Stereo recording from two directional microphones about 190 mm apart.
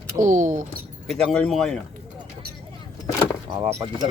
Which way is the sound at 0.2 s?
40° right (ahead or behind).